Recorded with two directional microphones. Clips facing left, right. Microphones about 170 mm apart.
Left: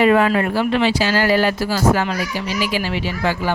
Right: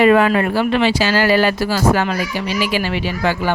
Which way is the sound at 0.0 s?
75° right (ahead or behind).